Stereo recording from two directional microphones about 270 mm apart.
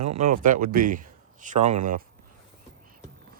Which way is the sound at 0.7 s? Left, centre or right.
Right.